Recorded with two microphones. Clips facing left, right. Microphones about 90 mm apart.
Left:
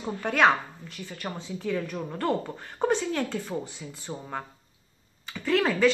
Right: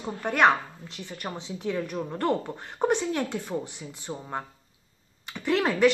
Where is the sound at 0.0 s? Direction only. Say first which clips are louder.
Even; 5° right (ahead or behind).